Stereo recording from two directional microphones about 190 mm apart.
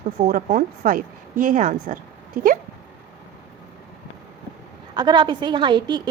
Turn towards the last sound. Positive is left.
turn(degrees=-25)  # may be behind; listen again after turning